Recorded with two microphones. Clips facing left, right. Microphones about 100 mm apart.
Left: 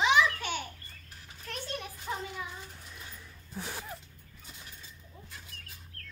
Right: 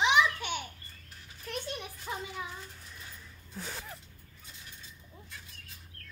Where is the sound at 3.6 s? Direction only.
10° left (ahead or behind).